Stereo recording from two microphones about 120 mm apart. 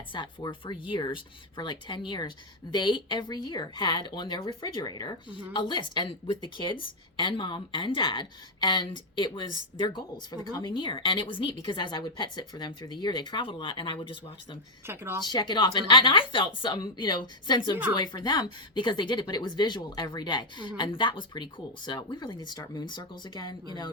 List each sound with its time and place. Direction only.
0.1 s a woman's voice: 40° left (ahead or behind)
14.8 s a woman's voice: 20° right (ahead or behind)
15.2 s a woman's voice: 40° left (ahead or behind)